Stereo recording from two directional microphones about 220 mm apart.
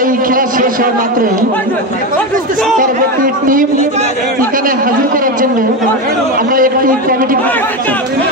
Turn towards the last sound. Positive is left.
turn(degrees=10)  # may be behind; listen again after turning